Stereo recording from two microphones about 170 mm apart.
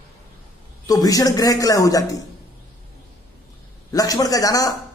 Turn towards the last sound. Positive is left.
turn(degrees=20)  # may be behind; listen again after turning